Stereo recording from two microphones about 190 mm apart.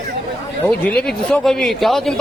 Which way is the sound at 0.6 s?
5° left (ahead or behind).